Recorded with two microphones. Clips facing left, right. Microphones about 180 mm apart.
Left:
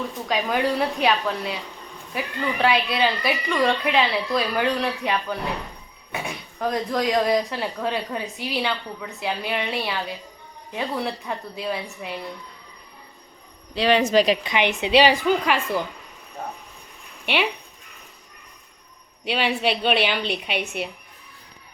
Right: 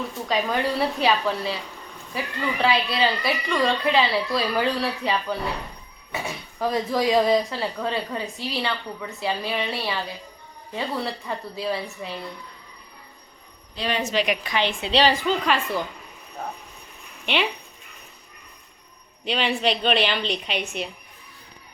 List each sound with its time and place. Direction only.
0.3 s a woman's voice: centre (ahead or behind)
13.7 s a woman's voice: 80° left
14.3 s a woman's voice: 20° left (ahead or behind)
17.2 s speech: 10° left (ahead or behind)
19.2 s a woman's voice: 5° left (ahead or behind)